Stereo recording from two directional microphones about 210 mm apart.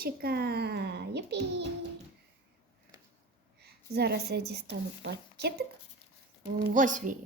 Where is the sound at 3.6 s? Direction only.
50° right (ahead or behind).